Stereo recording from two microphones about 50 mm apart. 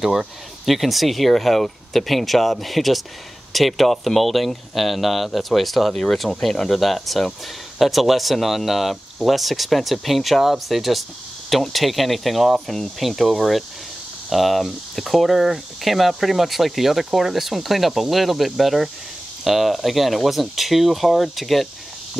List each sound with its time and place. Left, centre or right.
0.0 s speech: centre